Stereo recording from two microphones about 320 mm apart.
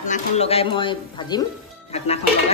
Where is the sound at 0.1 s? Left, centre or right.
Centre.